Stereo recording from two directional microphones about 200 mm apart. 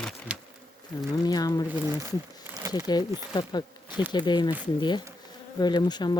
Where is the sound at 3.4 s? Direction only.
20° left (ahead or behind).